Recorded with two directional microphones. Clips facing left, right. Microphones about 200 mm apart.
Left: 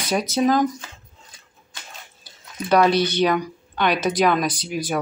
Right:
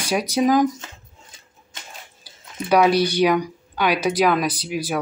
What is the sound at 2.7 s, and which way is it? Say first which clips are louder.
Speech: right 1 dB; 10° right (ahead or behind).